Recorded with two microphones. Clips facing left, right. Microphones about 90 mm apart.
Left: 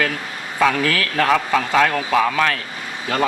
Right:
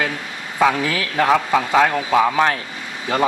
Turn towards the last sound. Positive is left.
turn(degrees=-20)  # may be behind; listen again after turning